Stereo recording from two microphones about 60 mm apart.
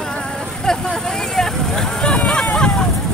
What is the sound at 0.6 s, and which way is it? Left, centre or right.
Vehicle, centre.